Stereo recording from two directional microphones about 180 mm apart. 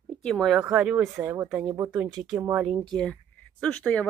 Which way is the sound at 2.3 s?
15° right (ahead or behind).